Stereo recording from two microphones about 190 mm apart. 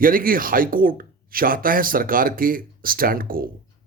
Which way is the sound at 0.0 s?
50° right (ahead or behind).